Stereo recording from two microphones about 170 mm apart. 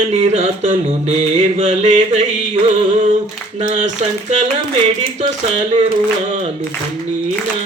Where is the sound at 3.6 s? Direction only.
45° right (ahead or behind).